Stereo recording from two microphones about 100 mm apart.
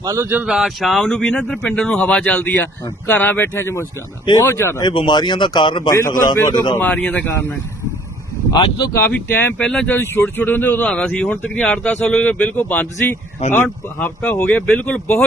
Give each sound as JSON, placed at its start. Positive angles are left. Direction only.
{"t": 0.0, "sound": "speech", "side_deg": -30}
{"t": 0.4, "sound": "a man's voice", "side_deg": -5}
{"t": 4.8, "sound": "speech", "side_deg": 50}
{"t": 5.9, "sound": "a man's voice", "side_deg": 40}
{"t": 6.7, "sound": "speech", "side_deg": 20}
{"t": 8.9, "sound": "a man's voice", "side_deg": 25}
{"t": 9.6, "sound": "speech", "side_deg": 10}